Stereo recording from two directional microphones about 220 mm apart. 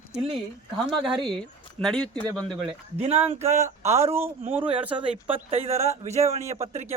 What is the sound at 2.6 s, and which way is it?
Speech, 25° right (ahead or behind).